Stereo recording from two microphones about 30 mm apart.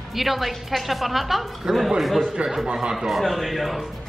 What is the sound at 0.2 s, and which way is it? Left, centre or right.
Speech, centre.